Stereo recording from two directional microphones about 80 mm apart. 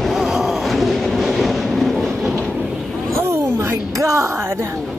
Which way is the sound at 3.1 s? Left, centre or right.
Right.